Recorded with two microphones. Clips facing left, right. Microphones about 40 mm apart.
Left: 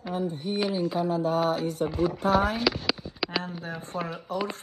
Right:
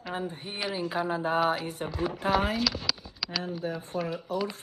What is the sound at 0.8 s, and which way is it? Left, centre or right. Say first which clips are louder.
Speech: left 3 dB; right.